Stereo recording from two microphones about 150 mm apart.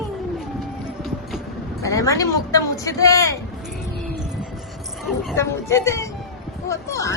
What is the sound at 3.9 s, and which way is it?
Music, 5° right (ahead or behind).